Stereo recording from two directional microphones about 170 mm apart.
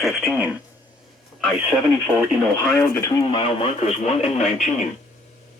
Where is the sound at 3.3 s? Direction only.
35° left (ahead or behind).